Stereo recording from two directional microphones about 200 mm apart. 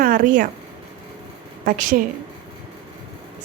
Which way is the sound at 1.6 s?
40° right (ahead or behind).